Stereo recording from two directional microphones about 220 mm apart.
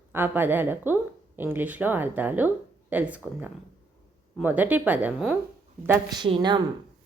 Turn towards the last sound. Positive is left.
turn(degrees=-20)  # may be behind; listen again after turning